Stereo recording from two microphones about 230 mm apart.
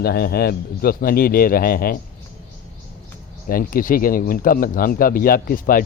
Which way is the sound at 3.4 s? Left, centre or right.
Left.